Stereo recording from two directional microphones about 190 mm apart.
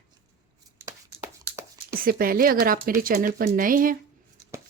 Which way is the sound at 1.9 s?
50° right (ahead or behind).